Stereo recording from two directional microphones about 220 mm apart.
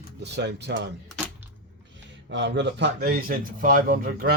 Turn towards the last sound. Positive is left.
turn(degrees=-40)  # may be behind; listen again after turning